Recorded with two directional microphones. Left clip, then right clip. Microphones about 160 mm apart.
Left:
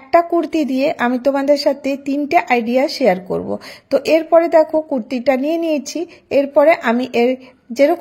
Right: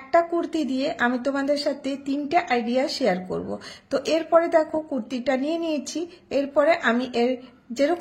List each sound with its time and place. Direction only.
0.1 s a woman's voice: 45° left (ahead or behind)